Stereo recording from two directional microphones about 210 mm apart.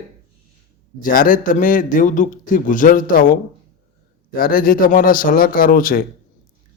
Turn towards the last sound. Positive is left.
turn(degrees=45)  # may be behind; listen again after turning